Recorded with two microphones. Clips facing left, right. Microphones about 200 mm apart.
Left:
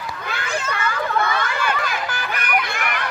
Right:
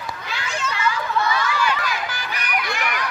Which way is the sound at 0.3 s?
55° left (ahead or behind).